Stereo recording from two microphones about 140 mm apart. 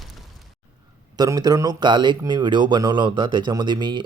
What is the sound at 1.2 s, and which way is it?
Speech, 25° right (ahead or behind).